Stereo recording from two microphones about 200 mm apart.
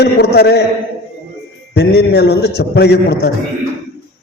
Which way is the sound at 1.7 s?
55° left (ahead or behind).